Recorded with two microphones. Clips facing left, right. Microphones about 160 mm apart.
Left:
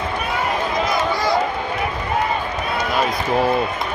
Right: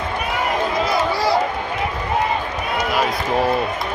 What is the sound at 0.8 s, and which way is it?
Run, 30° right (ahead or behind).